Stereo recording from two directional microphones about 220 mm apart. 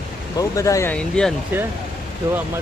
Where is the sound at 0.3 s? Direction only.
15° left (ahead or behind).